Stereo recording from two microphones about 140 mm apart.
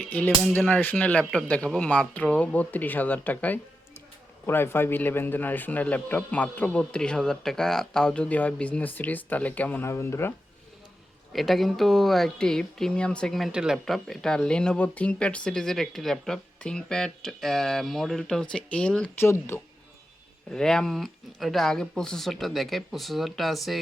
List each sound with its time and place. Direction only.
0.0 s a man's voice: 10° left (ahead or behind)
11.3 s speech: centre (ahead or behind)
19.2 s a man's voice: 15° left (ahead or behind)
20.5 s speech: 5° left (ahead or behind)